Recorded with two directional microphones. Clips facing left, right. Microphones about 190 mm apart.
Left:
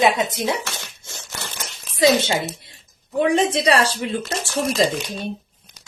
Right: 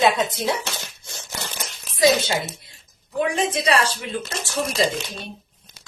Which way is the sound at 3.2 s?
35° left (ahead or behind).